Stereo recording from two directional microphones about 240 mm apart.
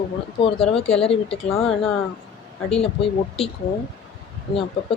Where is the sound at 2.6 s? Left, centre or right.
Left.